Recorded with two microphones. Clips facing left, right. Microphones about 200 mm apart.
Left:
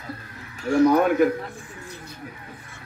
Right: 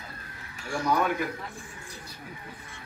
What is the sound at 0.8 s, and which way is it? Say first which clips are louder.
Speech: left 8 dB; 55° left (ahead or behind).